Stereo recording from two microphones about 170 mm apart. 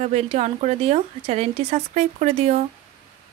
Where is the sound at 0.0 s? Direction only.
40° right (ahead or behind).